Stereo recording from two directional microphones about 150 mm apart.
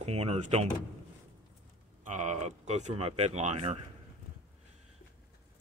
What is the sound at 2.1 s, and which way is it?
Speech, 55° right (ahead or behind).